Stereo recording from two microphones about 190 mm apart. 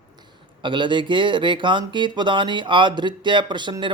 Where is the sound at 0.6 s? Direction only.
25° right (ahead or behind).